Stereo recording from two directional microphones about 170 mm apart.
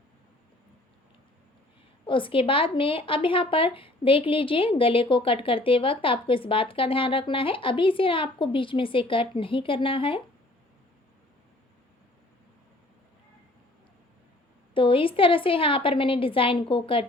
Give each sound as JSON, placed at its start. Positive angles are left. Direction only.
{"t": 2.0, "sound": "speech", "side_deg": 30}
{"t": 14.7, "sound": "speech", "side_deg": 30}